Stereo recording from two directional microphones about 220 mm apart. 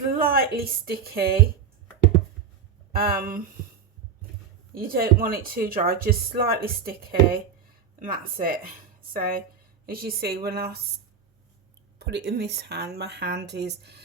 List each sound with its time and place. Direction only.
0.2 s speech: 45° right (ahead or behind)
2.9 s a woman's voice: 40° right (ahead or behind)
4.7 s a woman's voice: 40° right (ahead or behind)
11.9 s speech: 50° right (ahead or behind)